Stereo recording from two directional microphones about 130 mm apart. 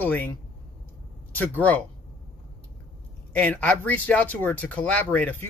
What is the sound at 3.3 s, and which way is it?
Speech, 10° left (ahead or behind).